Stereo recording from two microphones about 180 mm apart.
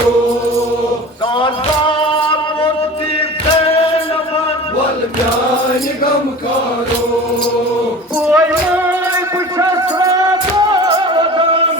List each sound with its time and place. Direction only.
1.4 s music: 30° left (ahead or behind)
3.6 s music: 35° left (ahead or behind)
8.3 s music: 10° right (ahead or behind); by 11.6 s 25° right (ahead or behind)